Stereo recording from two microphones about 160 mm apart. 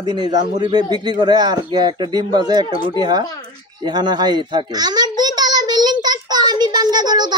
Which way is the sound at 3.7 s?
25° right (ahead or behind).